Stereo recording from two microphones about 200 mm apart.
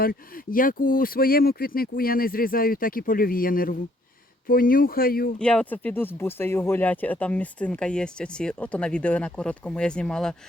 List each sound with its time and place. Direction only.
0.0 s speech: 45° left (ahead or behind)
5.4 s speech: 5° left (ahead or behind)